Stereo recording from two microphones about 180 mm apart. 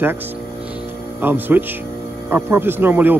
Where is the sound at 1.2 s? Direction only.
10° right (ahead or behind).